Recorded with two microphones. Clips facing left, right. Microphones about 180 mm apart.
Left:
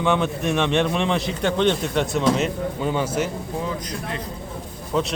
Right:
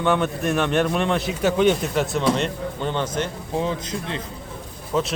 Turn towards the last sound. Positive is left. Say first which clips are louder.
# even
turn(degrees=0)  # may be behind; listen again after turning